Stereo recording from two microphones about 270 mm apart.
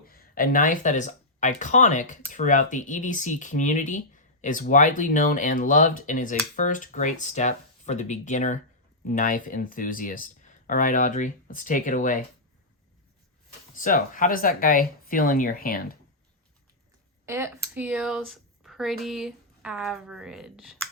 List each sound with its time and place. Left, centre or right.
0.0 s speech: left
13.7 s speech: left
17.2 s speech: centre